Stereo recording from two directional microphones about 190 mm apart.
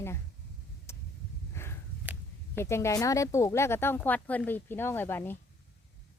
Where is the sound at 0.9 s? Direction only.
15° left (ahead or behind).